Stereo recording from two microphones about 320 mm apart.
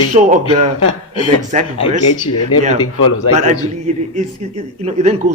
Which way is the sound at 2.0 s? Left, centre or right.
Left.